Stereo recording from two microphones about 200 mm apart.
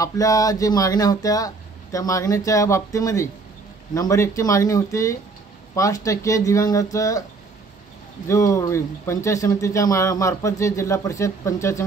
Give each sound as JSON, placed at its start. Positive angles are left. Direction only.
{"t": 0.0, "sound": "speech", "side_deg": 15}
{"t": 8.3, "sound": "speech", "side_deg": 15}